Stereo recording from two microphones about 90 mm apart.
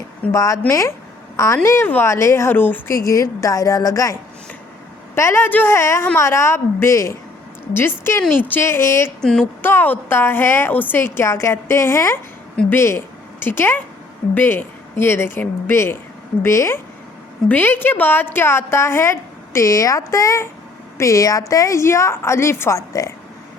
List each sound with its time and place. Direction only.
0.3 s a woman's voice: 40° left (ahead or behind)
17.5 s a woman's voice: 20° left (ahead or behind)
22.9 s a woman's voice: 40° left (ahead or behind)